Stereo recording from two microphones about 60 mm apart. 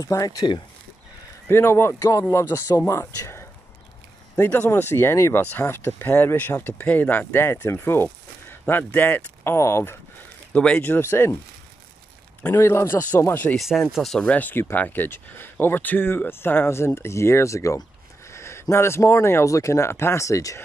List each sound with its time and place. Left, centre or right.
0.0 s speech: left
1.5 s speech: left
2.0 s speech: left
2.5 s speech: left
4.4 s speech: left
5.3 s speech: left
7.4 s speech: left
9.6 s speech: left
10.5 s speech: centre
11.0 s speech: left
12.4 s speech: left
13.6 s speech: centre
14.2 s speech: left
14.5 s speech: left